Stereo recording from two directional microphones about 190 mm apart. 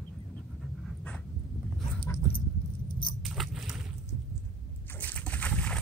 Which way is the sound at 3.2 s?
Centre (ahead or behind).